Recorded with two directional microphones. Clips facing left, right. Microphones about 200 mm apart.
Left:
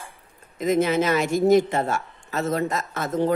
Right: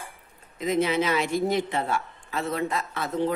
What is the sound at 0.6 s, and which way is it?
Speech, 45° left (ahead or behind).